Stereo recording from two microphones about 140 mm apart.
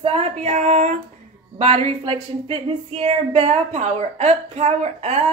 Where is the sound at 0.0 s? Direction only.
45° right (ahead or behind).